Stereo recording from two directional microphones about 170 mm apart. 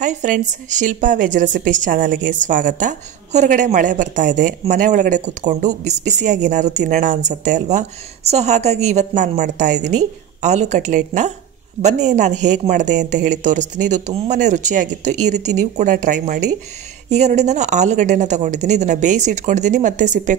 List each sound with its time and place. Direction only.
0.0 s a woman's voice: 45° right (ahead or behind)